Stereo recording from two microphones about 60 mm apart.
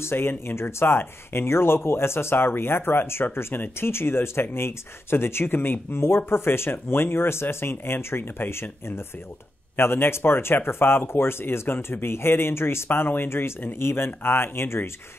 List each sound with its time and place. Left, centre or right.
0.0 s speech: left